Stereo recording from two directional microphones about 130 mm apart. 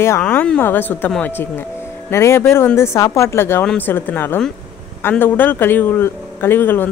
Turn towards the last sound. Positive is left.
turn(degrees=15)  # may be behind; listen again after turning